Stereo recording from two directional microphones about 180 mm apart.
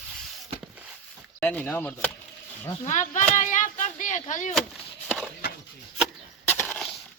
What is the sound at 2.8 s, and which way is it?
Speech, 45° left (ahead or behind).